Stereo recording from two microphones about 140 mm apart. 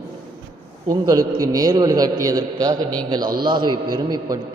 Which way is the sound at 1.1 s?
25° right (ahead or behind).